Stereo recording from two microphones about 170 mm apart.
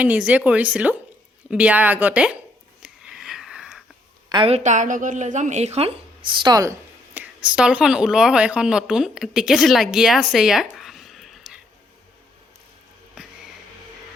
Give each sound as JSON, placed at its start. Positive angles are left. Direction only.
{"t": 0.0, "sound": "speech", "side_deg": -10}
{"t": 2.8, "sound": "sniff", "side_deg": -5}
{"t": 4.3, "sound": "a woman's voice", "side_deg": -30}
{"t": 6.3, "sound": "a woman's voice", "side_deg": -25}